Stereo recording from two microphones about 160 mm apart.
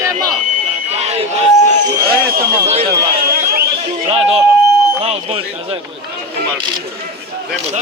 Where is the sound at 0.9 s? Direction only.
40° right (ahead or behind).